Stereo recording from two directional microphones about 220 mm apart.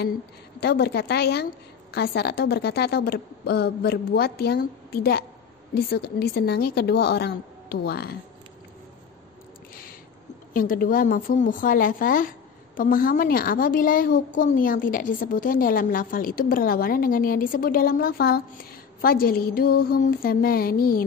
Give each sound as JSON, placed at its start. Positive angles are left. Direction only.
{"t": 0.6, "sound": "a woman's voice", "side_deg": 45}
{"t": 10.5, "sound": "a woman's voice", "side_deg": 40}